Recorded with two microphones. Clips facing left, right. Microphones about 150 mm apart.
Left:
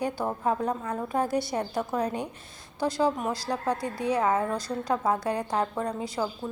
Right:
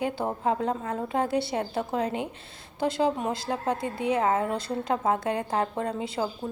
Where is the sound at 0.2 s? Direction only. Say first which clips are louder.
Right 1 dB; 30° right (ahead or behind).